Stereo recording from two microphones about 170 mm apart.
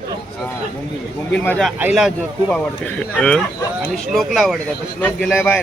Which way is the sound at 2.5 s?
5° left (ahead or behind).